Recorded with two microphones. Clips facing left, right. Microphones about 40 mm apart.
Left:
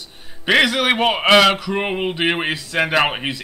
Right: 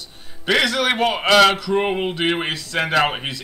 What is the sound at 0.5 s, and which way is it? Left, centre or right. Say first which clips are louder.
A man's voice: left 3 dB; left.